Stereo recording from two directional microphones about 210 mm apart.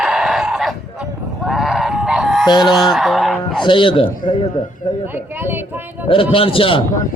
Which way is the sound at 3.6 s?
25° left (ahead or behind).